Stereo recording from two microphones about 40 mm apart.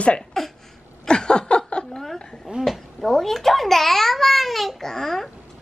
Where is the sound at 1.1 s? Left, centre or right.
Left.